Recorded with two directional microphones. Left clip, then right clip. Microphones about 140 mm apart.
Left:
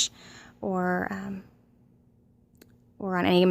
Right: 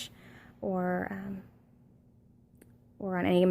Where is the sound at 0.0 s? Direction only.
25° left (ahead or behind).